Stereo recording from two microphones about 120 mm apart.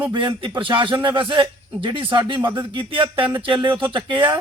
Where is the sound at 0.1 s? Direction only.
40° right (ahead or behind).